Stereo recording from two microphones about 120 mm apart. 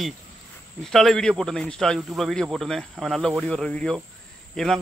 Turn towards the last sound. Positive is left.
turn(degrees=5)  # may be behind; listen again after turning